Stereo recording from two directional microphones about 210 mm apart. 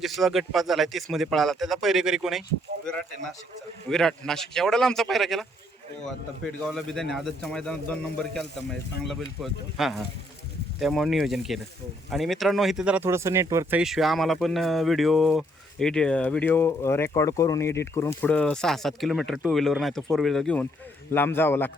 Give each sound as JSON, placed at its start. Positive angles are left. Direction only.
{"t": 0.0, "sound": "speech", "side_deg": 0}
{"t": 3.8, "sound": "speech", "side_deg": 0}